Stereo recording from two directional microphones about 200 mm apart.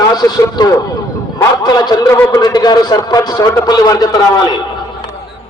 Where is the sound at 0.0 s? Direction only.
20° left (ahead or behind).